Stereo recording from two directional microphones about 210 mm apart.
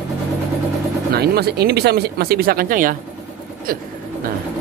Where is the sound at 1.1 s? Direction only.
50° right (ahead or behind).